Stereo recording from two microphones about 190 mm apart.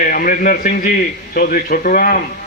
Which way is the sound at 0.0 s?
45° left (ahead or behind).